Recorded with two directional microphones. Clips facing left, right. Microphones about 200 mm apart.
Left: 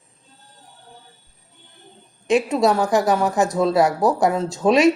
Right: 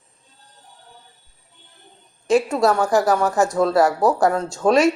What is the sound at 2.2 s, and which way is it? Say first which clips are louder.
A woman's voice: even; 20° left (ahead or behind).